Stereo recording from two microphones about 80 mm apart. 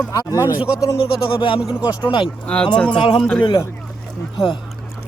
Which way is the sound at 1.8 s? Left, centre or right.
Centre.